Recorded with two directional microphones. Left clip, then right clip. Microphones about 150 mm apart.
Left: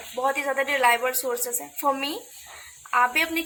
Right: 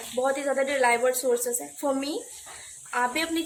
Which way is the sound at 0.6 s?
20° right (ahead or behind).